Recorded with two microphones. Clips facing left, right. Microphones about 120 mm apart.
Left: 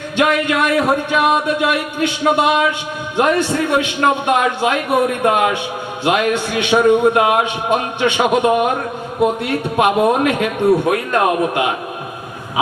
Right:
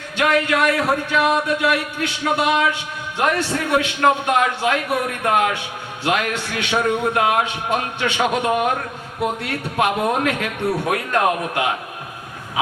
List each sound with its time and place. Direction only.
0.2 s a man's voice: 20° left (ahead or behind)